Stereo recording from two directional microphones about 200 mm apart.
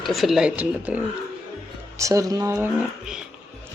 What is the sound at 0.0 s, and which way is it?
Speech, centre (ahead or behind).